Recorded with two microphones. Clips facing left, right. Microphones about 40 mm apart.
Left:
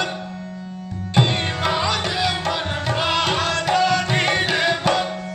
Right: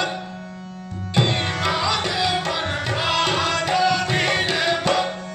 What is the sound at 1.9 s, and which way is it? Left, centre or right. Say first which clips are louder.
Music: even; centre.